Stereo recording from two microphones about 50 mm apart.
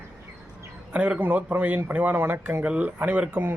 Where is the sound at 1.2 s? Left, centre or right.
Right.